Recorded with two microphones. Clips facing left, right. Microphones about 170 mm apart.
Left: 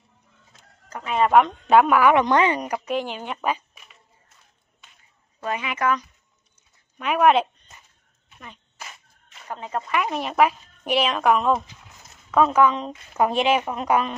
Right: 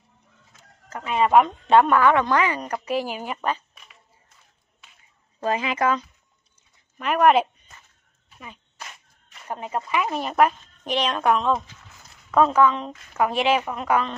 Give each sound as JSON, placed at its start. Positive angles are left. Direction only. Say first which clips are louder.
{"t": 0.9, "sound": "speech", "louder": "even", "side_deg": 0}
{"t": 2.8, "sound": "speech", "louder": "right 1 dB", "side_deg": -5}
{"t": 3.4, "sound": "a sound", "louder": "left 3 dB", "side_deg": 10}
{"t": 5.4, "sound": "speech", "louder": "right 3 dB", "side_deg": -30}
{"t": 7.0, "sound": "speech", "louder": "even", "side_deg": 0}
{"t": 9.5, "sound": "speech", "louder": "right 1 dB", "side_deg": -15}
{"t": 9.9, "sound": "a woman's voice", "louder": "even", "side_deg": 0}
{"t": 12.6, "sound": "a woman's voice", "louder": "even", "side_deg": 15}